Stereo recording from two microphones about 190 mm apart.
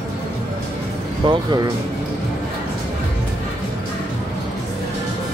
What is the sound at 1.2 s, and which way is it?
Speech, 25° right (ahead or behind).